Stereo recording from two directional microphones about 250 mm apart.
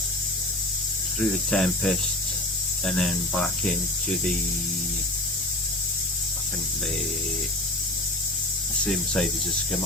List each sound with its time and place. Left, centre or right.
1.2 s speech: centre
8.8 s speech: centre